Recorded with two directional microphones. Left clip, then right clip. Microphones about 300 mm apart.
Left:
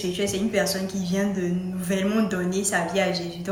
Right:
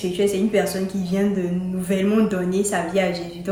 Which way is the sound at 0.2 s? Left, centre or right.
Centre.